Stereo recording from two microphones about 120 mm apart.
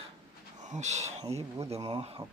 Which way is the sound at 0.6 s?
80° right.